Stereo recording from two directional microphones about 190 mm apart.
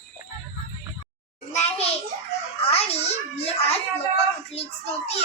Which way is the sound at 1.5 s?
30° left (ahead or behind).